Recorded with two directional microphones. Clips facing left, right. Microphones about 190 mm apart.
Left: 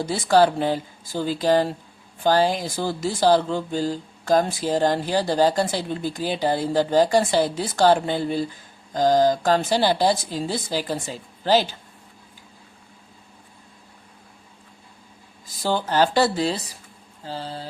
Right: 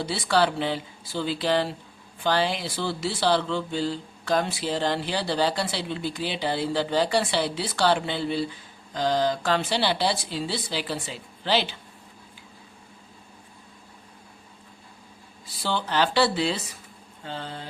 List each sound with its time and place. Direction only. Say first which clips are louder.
0.0 s speech: left 5 dB; 45° left (ahead or behind)
15.4 s speech: left 5 dB; 45° left (ahead or behind)